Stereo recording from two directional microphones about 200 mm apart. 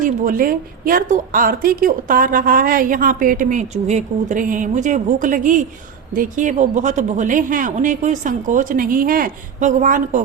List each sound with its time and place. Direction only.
0.0 s a woman's voice: 45° right (ahead or behind)